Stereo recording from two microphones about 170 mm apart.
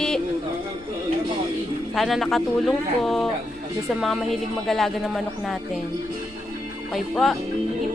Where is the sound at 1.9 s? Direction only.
Centre (ahead or behind).